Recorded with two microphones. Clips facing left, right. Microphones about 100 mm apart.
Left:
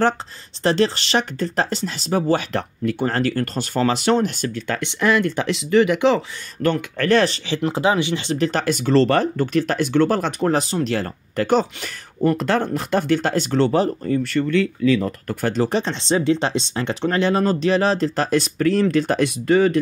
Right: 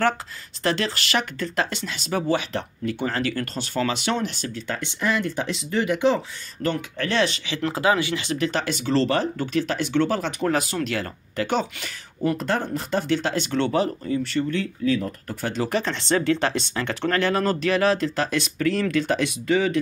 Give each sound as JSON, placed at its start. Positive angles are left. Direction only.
{"t": 0.7, "sound": "speech", "side_deg": 30}
{"t": 2.5, "sound": "speech", "side_deg": 55}
{"t": 7.2, "sound": "speech", "side_deg": 35}
{"t": 7.6, "sound": "speech", "side_deg": 25}
{"t": 8.5, "sound": "speech", "side_deg": 45}
{"t": 10.5, "sound": "speech", "side_deg": 30}
{"t": 11.3, "sound": "speech", "side_deg": 45}
{"t": 12.4, "sound": "speech", "side_deg": 70}
{"t": 14.0, "sound": "speech", "side_deg": 55}
{"t": 14.5, "sound": "speech", "side_deg": 85}
{"t": 15.4, "sound": "speech", "side_deg": 40}
{"t": 15.7, "sound": "speech", "side_deg": 20}